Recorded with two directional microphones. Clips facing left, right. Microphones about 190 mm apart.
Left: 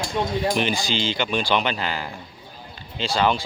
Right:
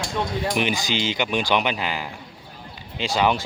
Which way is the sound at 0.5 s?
15° right (ahead or behind).